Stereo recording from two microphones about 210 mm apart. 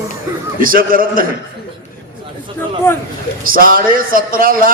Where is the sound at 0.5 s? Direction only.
40° right (ahead or behind).